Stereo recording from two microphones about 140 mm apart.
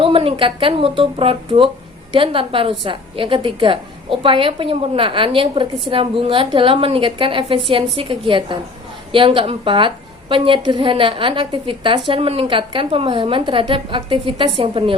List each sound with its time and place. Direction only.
0.0 s a woman's voice: 40° right (ahead or behind)